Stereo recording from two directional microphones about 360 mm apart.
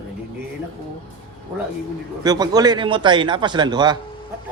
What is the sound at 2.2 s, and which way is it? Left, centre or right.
A man's voice, centre.